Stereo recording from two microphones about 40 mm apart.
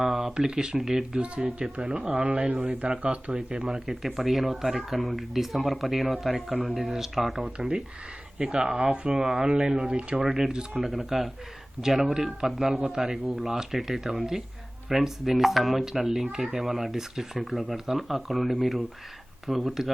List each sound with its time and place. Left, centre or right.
0.0 s a sound: centre
0.3 s speech: centre
1.4 s speech: right
3.5 s speech: centre
3.8 s speech: centre
7.4 s speech: centre
10.8 s speech: centre
19.6 s speech: centre